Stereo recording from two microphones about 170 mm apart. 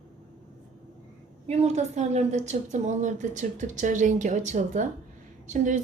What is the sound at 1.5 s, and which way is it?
A woman's voice, 40° right (ahead or behind).